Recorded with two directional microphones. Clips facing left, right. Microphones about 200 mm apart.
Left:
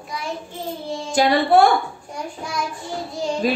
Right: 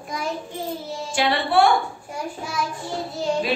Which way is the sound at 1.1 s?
40° left (ahead or behind).